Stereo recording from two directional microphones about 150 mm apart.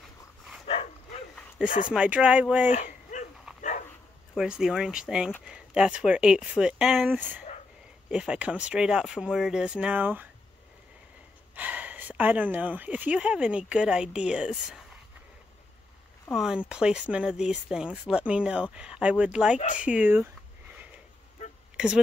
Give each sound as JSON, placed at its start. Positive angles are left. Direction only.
{"t": 0.7, "sound": "bow-wow", "side_deg": 40}
{"t": 1.9, "sound": "speech", "side_deg": -10}
{"t": 2.7, "sound": "a sound", "side_deg": 55}
{"t": 3.5, "sound": "dog", "side_deg": -5}
{"t": 4.4, "sound": "speech", "side_deg": -5}
{"t": 11.5, "sound": "a woman's voice", "side_deg": -10}
{"t": 16.3, "sound": "speech", "side_deg": -5}
{"t": 21.7, "sound": "speech", "side_deg": -5}